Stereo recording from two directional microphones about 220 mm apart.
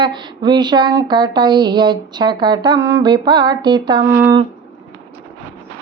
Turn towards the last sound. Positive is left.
turn(degrees=-10)  # may be behind; listen again after turning